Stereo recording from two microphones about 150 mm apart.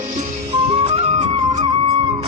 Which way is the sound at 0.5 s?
40° right (ahead or behind).